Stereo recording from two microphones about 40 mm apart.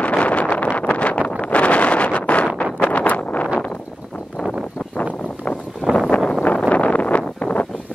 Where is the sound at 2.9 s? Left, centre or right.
Left.